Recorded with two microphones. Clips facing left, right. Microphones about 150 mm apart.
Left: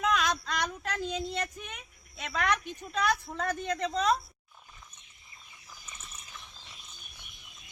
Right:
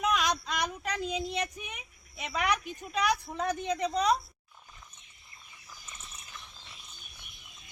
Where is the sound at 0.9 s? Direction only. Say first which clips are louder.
Even; centre (ahead or behind).